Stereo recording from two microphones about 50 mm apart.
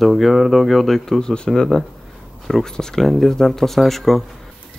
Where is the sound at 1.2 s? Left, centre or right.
Centre.